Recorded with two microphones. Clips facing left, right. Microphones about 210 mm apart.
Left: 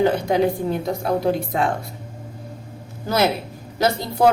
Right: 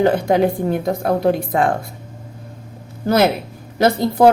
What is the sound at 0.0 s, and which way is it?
A woman's voice, 55° right (ahead or behind).